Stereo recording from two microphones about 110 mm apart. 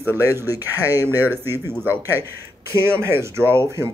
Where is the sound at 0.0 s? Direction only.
20° right (ahead or behind).